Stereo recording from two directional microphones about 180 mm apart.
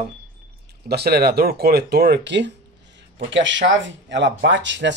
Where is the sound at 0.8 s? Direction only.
60° right (ahead or behind).